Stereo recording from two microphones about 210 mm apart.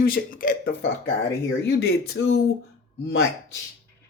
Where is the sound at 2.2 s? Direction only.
60° left (ahead or behind).